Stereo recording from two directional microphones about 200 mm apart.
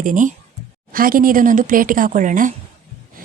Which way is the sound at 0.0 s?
40° right (ahead or behind).